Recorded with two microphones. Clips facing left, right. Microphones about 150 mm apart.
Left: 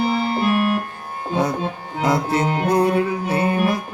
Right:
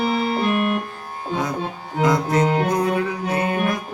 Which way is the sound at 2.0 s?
30° left (ahead or behind).